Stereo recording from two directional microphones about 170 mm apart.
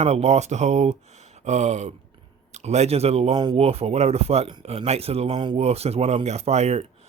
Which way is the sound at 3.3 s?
25° right (ahead or behind).